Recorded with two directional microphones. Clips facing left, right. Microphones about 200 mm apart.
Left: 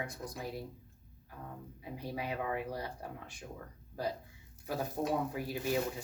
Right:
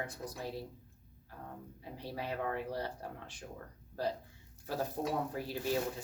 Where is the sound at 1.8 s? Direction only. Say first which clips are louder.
Left 2 dB; 10° left (ahead or behind).